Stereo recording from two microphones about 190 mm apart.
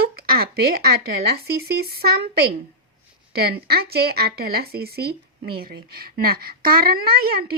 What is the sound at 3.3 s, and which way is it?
A woman's voice, 55° right (ahead or behind).